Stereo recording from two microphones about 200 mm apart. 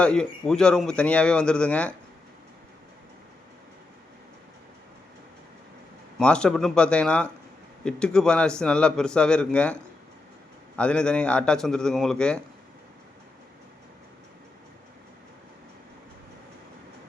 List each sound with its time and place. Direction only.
0.0 s a man's voice: 5° left (ahead or behind)
6.1 s a man's voice: 5° left (ahead or behind)
10.8 s a man's voice: 5° left (ahead or behind)